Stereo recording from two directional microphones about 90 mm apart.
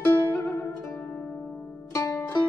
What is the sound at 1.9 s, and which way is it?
Music, 35° left (ahead or behind).